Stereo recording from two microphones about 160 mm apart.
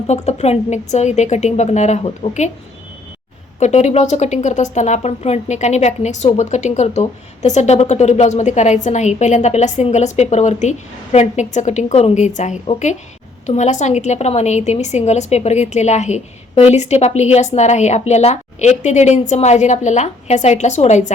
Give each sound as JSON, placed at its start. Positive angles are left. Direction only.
{"t": 0.1, "sound": "a woman's voice", "side_deg": 45}
{"t": 3.6, "sound": "a woman's voice", "side_deg": 45}